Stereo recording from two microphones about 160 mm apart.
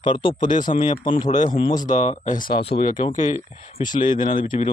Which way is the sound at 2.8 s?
55° left (ahead or behind).